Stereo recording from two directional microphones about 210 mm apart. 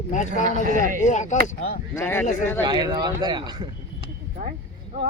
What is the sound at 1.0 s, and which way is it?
Speech, 35° left (ahead or behind).